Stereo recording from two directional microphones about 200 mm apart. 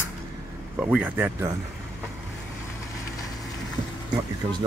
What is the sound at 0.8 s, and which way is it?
Speech, 5° right (ahead or behind).